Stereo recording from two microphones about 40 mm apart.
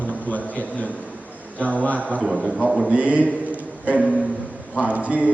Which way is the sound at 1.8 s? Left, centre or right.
Left.